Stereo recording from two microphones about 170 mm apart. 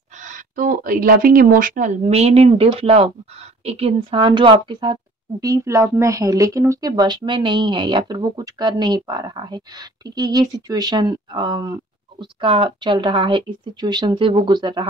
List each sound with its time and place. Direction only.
0.2 s speech: 50° right (ahead or behind); by 14.9 s 25° right (ahead or behind)